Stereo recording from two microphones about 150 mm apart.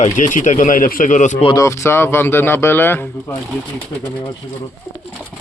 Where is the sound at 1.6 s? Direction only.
20° left (ahead or behind).